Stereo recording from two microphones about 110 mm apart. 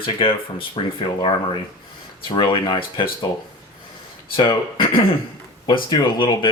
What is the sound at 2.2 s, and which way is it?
Speech, 50° left (ahead or behind).